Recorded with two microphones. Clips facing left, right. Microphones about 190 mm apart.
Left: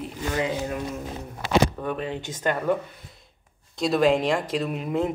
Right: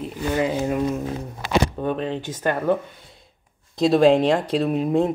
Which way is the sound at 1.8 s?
25° right (ahead or behind).